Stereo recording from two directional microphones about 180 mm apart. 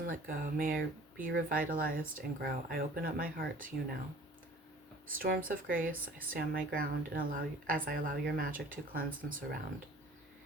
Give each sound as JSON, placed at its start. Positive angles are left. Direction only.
{"t": 0.1, "sound": "speech", "side_deg": -50}
{"t": 5.0, "sound": "speech", "side_deg": -50}